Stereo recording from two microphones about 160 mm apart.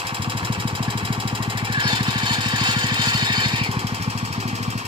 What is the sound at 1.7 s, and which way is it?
Vehicle, 30° right (ahead or behind).